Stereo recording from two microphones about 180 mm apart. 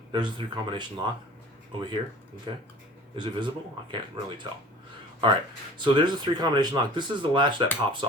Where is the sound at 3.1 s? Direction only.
25° right (ahead or behind).